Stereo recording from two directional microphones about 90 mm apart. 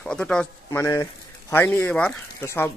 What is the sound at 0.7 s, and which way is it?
Speech, 35° left (ahead or behind).